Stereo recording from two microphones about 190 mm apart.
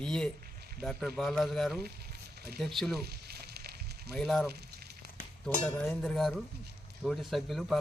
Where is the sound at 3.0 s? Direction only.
55° right (ahead or behind).